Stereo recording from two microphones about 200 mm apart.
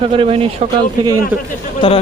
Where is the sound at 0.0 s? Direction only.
30° right (ahead or behind).